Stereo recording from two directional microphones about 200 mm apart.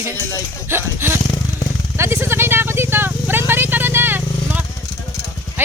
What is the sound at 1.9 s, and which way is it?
Vehicle, 10° right (ahead or behind).